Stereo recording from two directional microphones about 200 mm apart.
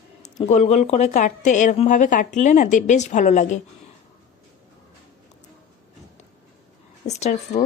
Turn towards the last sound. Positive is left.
turn(degrees=35)  # may be behind; listen again after turning